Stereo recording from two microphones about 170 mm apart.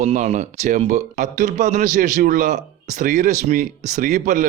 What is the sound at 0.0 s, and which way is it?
A man's voice, 40° right (ahead or behind).